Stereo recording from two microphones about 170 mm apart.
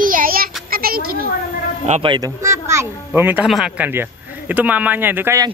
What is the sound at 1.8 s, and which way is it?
Speech, 40° right (ahead or behind).